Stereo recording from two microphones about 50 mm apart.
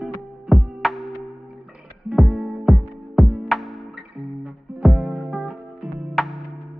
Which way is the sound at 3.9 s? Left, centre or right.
Centre.